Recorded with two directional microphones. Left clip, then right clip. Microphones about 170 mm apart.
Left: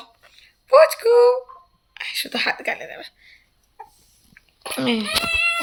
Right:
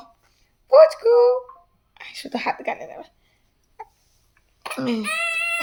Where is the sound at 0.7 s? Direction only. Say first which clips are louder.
Even; 20° right (ahead or behind).